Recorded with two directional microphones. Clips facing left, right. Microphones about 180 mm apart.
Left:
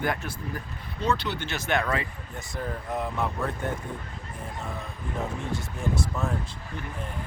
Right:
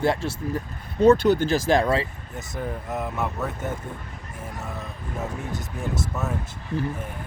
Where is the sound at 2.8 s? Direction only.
5° right (ahead or behind).